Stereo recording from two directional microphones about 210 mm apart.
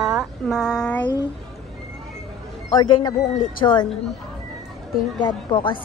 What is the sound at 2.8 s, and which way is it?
Speech, 20° left (ahead or behind).